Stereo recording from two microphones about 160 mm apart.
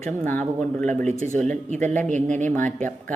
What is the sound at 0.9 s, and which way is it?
A woman's voice, 50° right (ahead or behind).